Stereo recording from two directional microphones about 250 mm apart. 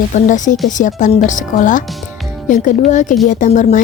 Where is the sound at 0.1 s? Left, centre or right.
Left.